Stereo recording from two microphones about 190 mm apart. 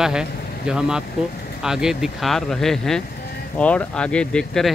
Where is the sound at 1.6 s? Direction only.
5° right (ahead or behind).